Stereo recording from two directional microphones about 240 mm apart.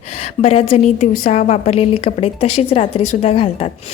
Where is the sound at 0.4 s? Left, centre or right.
Left.